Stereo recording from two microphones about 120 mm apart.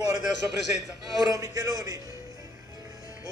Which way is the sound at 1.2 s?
30° right (ahead or behind).